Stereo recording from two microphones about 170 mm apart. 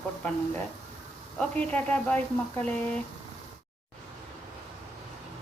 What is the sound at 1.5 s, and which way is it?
Speech, 10° left (ahead or behind).